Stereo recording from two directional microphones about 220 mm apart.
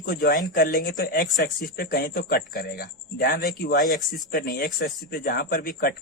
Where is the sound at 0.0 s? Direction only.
40° left (ahead or behind).